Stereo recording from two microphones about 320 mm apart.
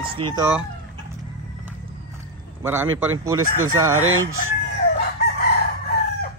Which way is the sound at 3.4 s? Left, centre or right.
Right.